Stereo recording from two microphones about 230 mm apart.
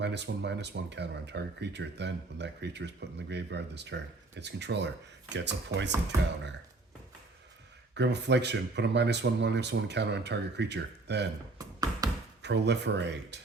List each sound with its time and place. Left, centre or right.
0.0 s speech: right
7.9 s speech: right
11.5 s music: centre
12.4 s speech: right